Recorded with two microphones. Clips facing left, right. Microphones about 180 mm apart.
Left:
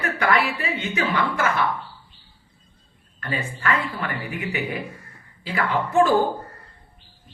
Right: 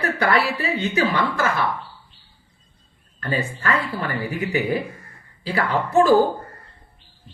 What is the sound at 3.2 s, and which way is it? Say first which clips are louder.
A woman's voice: right 3 dB; 35° right (ahead or behind).